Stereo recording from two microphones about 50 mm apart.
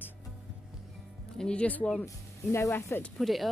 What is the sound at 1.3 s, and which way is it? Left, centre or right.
Speech, centre.